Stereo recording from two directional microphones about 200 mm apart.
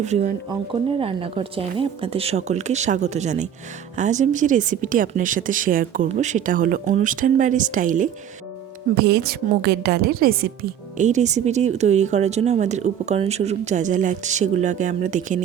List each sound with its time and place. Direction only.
0.0 s a woman's voice: 35° right (ahead or behind)
9.0 s a woman's voice: 55° right (ahead or behind); by 15.4 s 40° right (ahead or behind)